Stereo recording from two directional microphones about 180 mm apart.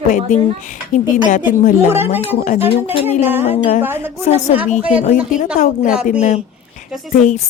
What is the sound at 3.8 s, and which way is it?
Speech, 10° right (ahead or behind).